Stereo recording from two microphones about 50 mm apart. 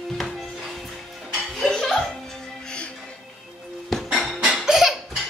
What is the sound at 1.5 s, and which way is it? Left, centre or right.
Laughter, centre.